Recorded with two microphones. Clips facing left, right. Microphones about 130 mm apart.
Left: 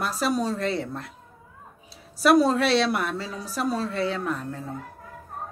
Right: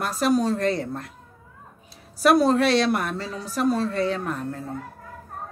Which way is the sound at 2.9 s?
5° left (ahead or behind).